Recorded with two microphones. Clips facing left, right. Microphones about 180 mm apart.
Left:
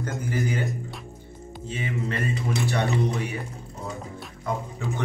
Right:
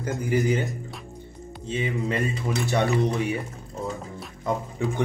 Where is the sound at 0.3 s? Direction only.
20° right (ahead or behind).